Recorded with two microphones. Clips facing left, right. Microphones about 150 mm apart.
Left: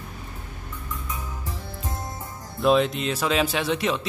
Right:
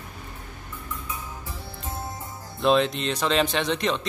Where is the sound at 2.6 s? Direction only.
5° left (ahead or behind).